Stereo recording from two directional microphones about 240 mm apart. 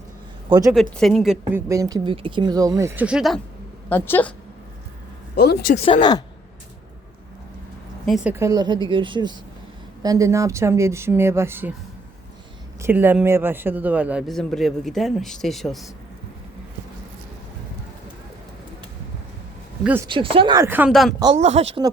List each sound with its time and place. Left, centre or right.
0.7 s a man's voice: centre
1.6 s a woman's voice: centre
5.4 s speech: left
5.7 s speech: left
8.0 s speech: centre
12.8 s a man's voice: centre
19.8 s speech: centre
20.1 s speech: right; by 21.1 s centre
21.3 s speech: right